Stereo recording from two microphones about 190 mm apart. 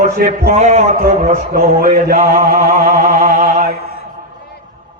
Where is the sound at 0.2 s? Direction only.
50° right (ahead or behind).